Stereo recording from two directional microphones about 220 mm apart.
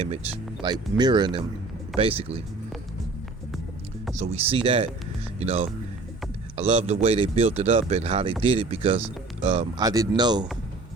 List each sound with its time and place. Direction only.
0.6 s speech: 20° right (ahead or behind)
4.1 s speech: 30° right (ahead or behind)